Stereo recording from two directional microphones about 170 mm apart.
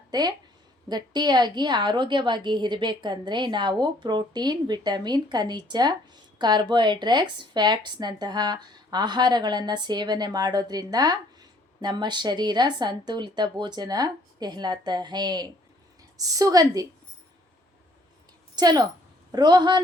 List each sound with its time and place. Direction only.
0.1 s speech: 25° right (ahead or behind)
18.5 s speech: 25° right (ahead or behind)